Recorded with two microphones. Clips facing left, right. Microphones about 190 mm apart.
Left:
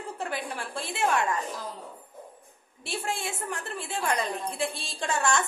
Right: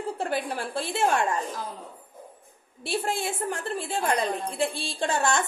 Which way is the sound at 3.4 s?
30° right (ahead or behind).